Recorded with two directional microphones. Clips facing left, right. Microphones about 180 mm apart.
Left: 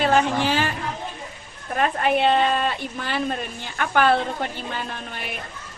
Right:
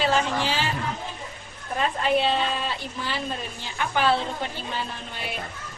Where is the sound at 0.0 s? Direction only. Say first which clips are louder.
Left 4 dB; 55° left (ahead or behind).